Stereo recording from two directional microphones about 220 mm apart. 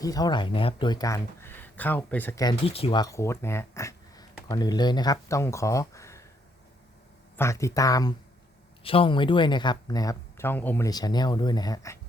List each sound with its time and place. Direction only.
0.0 s speech: 15° left (ahead or behind)
7.3 s speech: 15° left (ahead or behind)